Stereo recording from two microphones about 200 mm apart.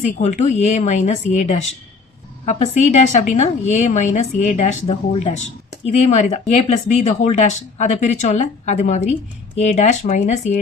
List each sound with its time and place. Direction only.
0.0 s speech: 35° left (ahead or behind)